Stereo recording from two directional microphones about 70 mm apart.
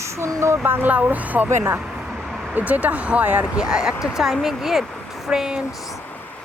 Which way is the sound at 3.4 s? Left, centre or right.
Centre.